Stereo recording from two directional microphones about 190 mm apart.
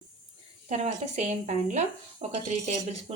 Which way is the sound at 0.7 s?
35° right (ahead or behind).